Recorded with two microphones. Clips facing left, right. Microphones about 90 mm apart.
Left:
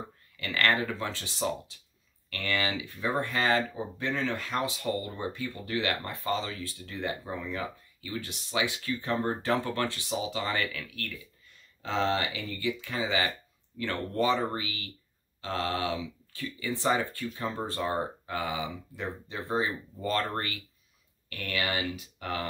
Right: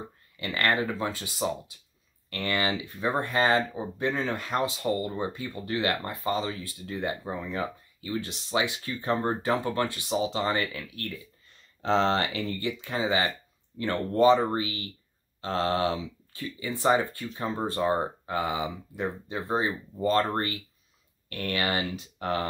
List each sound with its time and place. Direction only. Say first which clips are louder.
0.4 s speech: right 1 dB; 20° right (ahead or behind)
2.2 s speech: right 3 dB; 25° right (ahead or behind)
9.7 s speech: right 3 dB; 20° right (ahead or behind)
14.5 s speech: right 6 dB; 30° right (ahead or behind)
16.3 s speech: even; 25° right (ahead or behind)